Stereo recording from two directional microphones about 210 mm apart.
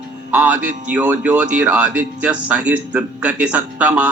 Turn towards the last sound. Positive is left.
turn(degrees=-5)  # may be behind; listen again after turning